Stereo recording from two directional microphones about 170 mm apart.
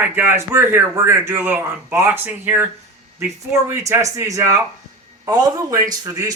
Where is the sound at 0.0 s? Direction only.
10° right (ahead or behind).